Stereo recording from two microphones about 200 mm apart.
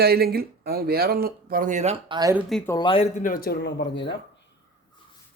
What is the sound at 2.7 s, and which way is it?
Speech, 25° left (ahead or behind).